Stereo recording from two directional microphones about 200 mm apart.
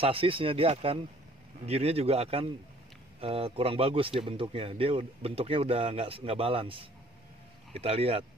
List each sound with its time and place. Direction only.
0.0 s speech: 25° right (ahead or behind)